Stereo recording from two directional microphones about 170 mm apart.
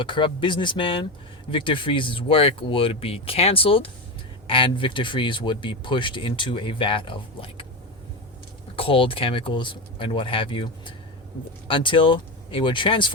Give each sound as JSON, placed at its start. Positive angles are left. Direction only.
{"t": 0.0, "sound": "speech", "side_deg": 30}
{"t": 8.7, "sound": "speech", "side_deg": 30}